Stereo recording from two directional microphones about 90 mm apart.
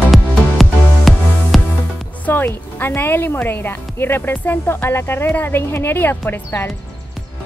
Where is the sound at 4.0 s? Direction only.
25° left (ahead or behind).